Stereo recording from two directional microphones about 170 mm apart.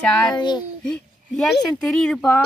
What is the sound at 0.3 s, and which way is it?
Speech, 25° left (ahead or behind).